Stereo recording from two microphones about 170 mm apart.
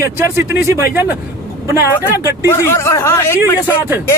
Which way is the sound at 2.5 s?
15° left (ahead or behind).